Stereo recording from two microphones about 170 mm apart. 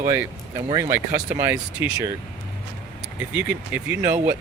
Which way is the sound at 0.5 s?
25° right (ahead or behind).